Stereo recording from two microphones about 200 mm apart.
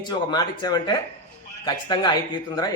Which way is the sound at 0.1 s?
20° left (ahead or behind).